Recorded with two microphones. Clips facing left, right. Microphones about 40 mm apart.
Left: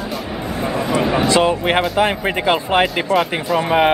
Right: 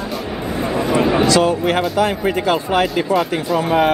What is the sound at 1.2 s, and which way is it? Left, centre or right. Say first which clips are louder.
Speech: even; left.